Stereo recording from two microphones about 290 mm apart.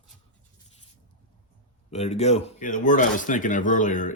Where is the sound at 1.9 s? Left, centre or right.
Left.